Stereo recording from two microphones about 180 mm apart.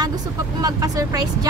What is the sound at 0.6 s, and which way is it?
Speech, 20° right (ahead or behind).